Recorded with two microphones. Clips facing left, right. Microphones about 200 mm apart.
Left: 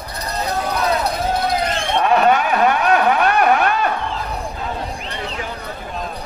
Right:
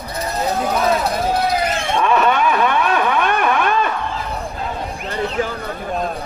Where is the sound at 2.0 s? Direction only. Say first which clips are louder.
Left 1 dB; 40° left (ahead or behind).